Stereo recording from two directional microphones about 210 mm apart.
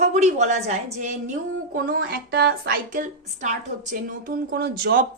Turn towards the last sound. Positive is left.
turn(degrees=-45)  # may be behind; listen again after turning